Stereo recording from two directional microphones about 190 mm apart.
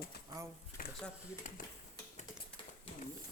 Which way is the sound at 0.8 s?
50° left (ahead or behind).